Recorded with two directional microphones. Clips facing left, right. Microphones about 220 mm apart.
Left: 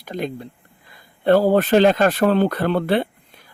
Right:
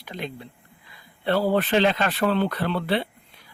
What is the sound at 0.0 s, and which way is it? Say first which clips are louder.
Speech: left 7 dB; 45° left (ahead or behind).